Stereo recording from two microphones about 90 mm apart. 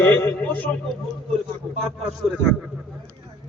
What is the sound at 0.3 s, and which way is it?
Speech, 20° left (ahead or behind).